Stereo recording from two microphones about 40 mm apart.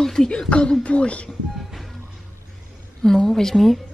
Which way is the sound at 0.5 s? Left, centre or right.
Left.